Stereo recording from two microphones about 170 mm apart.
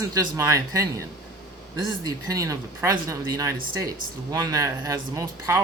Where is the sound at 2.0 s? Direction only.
20° right (ahead or behind).